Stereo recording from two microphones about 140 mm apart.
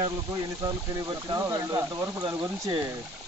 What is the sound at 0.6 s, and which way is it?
Speech, 30° right (ahead or behind).